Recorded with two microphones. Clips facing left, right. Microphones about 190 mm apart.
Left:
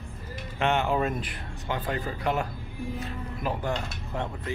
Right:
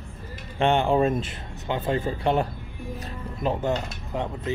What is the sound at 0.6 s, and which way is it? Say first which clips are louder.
Speech: right 5 dB; 30° right (ahead or behind).